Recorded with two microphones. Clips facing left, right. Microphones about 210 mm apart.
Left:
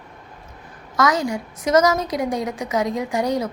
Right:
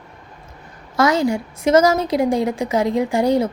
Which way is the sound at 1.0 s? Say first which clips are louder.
Right 4 dB; 30° right (ahead or behind).